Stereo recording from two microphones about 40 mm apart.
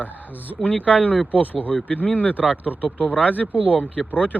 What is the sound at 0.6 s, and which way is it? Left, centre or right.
Speech, left.